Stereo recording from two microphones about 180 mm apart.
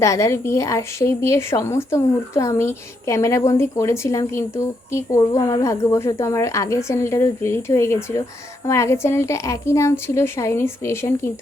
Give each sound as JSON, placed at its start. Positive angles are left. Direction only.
{"t": 0.0, "sound": "a woman's voice", "side_deg": 15}